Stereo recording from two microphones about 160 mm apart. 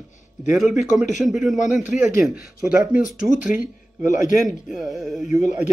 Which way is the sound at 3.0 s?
55° left (ahead or behind).